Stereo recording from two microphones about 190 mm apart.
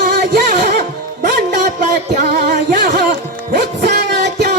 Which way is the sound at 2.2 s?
55° right (ahead or behind).